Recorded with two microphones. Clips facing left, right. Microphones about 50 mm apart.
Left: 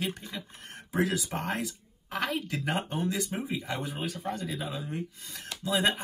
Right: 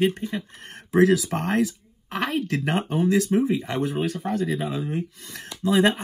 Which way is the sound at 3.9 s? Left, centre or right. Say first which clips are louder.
Right 9 dB; right.